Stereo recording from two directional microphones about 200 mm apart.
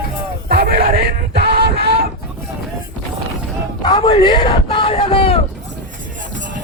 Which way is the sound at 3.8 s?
20° left (ahead or behind).